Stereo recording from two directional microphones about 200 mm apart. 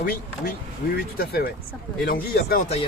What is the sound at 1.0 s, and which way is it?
A man's voice, 50° left (ahead or behind).